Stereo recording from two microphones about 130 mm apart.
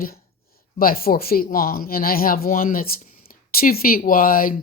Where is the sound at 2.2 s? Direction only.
90° left.